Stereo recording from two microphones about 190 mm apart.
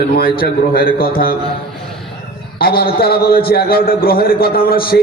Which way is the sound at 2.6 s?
55° left (ahead or behind).